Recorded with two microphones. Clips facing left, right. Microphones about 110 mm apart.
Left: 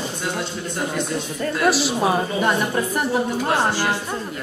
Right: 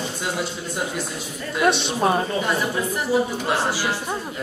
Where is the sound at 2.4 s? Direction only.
55° left (ahead or behind).